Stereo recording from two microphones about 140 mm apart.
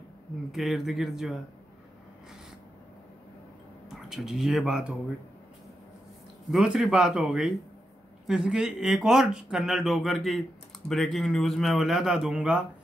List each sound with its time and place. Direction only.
0.5 s speech: centre (ahead or behind)
3.9 s speech: centre (ahead or behind)
6.5 s speech: 5° right (ahead or behind)